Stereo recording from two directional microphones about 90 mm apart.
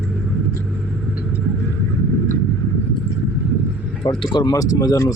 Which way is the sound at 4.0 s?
70° left (ahead or behind).